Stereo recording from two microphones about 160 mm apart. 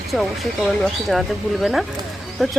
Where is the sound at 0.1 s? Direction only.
5° left (ahead or behind).